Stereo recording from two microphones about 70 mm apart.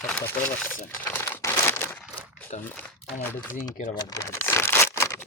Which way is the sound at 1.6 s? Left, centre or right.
Left.